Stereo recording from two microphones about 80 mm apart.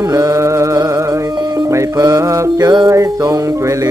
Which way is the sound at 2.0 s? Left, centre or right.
Right.